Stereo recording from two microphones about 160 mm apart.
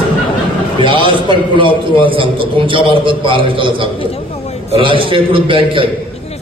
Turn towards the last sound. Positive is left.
turn(degrees=-35)  # may be behind; listen again after turning